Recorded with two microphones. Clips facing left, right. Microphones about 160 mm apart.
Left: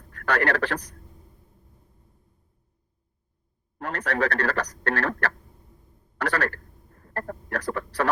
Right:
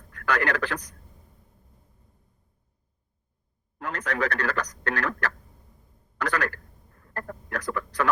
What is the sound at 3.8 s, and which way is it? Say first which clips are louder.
Speech: left 2 dB; 35° left (ahead or behind).